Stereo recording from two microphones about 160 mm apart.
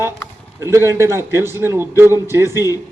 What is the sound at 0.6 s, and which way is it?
A man's voice, 20° right (ahead or behind).